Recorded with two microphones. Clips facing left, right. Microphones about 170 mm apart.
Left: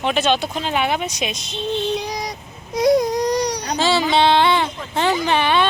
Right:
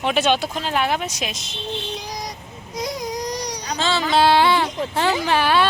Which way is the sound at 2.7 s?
65° left (ahead or behind).